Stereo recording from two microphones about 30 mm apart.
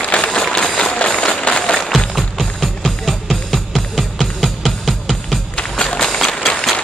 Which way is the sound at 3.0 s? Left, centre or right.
Centre.